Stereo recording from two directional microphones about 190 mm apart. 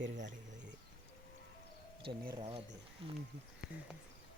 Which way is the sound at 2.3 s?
25° right (ahead or behind).